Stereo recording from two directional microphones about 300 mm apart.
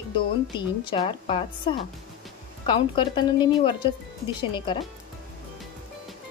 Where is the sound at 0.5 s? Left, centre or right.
Centre.